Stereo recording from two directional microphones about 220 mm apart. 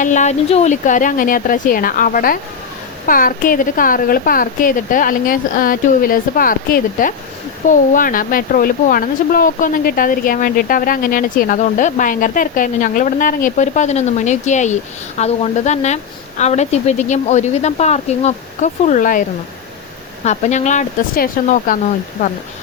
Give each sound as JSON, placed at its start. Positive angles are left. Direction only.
{"t": 0.0, "sound": "speech", "side_deg": 35}
{"t": 20.2, "sound": "speech", "side_deg": 30}